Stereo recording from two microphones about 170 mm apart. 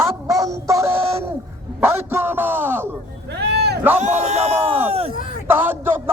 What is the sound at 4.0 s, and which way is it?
Speech, 40° right (ahead or behind).